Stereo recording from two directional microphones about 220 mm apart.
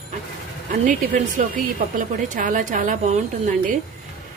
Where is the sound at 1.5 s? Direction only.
35° right (ahead or behind).